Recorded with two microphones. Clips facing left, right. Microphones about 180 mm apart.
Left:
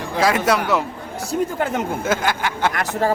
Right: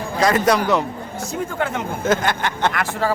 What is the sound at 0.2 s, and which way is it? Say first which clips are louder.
Speech: right 1 dB; 5° left (ahead or behind).